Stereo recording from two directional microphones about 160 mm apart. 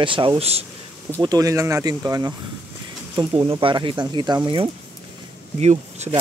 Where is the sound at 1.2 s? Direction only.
25° right (ahead or behind).